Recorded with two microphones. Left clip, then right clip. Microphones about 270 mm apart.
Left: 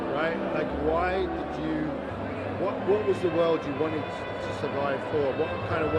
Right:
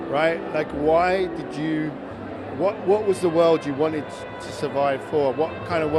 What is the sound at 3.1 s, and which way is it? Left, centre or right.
Speech, right.